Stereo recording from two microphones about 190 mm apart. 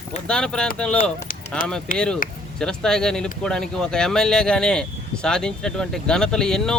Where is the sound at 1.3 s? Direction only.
45° left (ahead or behind).